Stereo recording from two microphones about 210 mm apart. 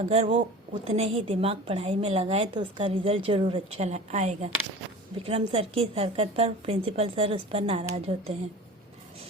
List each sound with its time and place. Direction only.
0.0 s a woman's voice: 30° right (ahead or behind)